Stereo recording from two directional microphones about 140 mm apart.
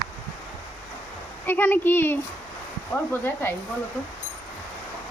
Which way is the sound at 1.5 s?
15° left (ahead or behind).